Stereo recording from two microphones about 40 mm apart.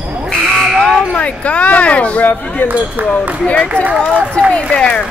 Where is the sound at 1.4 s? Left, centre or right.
Left.